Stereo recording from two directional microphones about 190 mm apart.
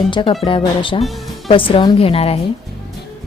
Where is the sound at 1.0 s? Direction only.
Centre (ahead or behind).